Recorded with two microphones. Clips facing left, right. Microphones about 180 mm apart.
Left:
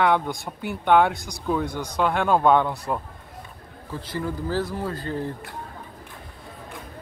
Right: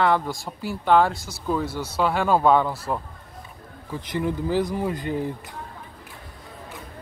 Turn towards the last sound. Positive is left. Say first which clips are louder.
# right 2 dB
turn(degrees=-15)  # may be behind; listen again after turning